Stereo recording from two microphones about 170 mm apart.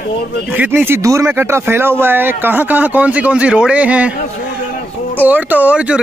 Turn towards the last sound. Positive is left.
turn(degrees=-5)  # may be behind; listen again after turning